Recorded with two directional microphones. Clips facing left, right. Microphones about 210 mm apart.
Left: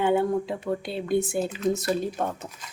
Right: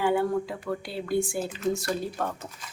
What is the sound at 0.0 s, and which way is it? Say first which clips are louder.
Speech: left 2 dB; 25° left (ahead or behind).